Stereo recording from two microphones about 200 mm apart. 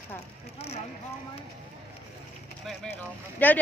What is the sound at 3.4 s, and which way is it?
Speech, 10° left (ahead or behind).